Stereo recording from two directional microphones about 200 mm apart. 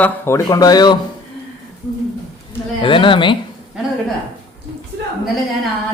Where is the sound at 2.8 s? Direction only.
25° left (ahead or behind).